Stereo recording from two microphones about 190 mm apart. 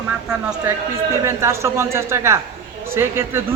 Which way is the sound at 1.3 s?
15° right (ahead or behind).